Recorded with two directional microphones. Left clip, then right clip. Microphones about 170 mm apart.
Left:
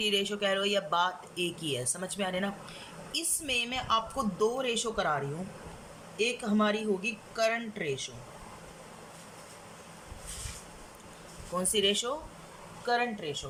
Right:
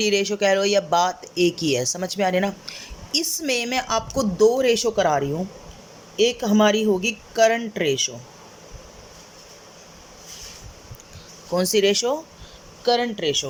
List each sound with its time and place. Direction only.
0.0 s speech: 35° right (ahead or behind)
11.5 s speech: 35° right (ahead or behind)
12.8 s speech: 50° right (ahead or behind)